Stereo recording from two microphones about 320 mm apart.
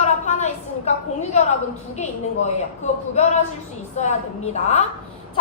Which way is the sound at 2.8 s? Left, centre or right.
Left.